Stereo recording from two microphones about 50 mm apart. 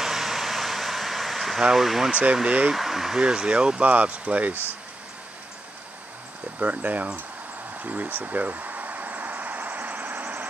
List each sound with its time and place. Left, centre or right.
0.0 s a sound: centre
2.7 s speech: centre; by 4.6 s right
6.6 s speech: right
7.8 s vehicle: right